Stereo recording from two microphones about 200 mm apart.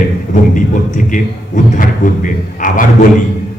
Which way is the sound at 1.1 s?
40° left (ahead or behind).